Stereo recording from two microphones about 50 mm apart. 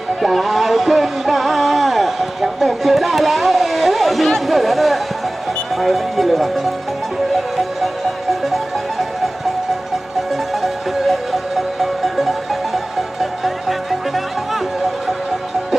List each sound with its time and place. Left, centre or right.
0.2 s music: centre
5.7 s speech: centre
8.3 s music: centre
10.5 s music: centre